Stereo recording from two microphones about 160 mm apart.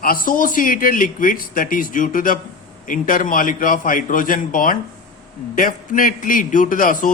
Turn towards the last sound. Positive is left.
turn(degrees=55)  # may be behind; listen again after turning